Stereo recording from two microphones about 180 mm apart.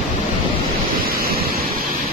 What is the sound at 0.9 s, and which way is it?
Waves, 55° right (ahead or behind).